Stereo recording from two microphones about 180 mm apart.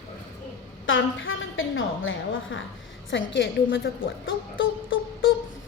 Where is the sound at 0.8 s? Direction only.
90° left.